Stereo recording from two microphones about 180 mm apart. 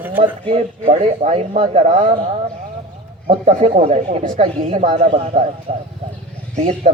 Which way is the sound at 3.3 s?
35° right (ahead or behind).